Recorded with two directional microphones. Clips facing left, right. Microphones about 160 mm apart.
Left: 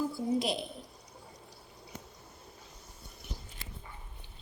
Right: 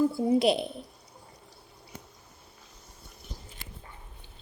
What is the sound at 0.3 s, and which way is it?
Speech, 65° right (ahead or behind).